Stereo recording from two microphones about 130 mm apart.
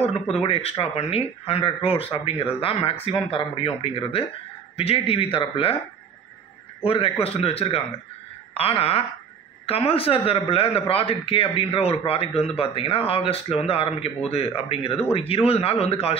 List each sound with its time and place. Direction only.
0.0 s a man's voice: 50° left (ahead or behind)
6.8 s a man's voice: 45° left (ahead or behind)